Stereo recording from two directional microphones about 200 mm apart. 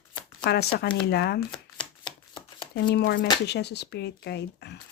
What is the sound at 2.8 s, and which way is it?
Speech, 55° left (ahead or behind).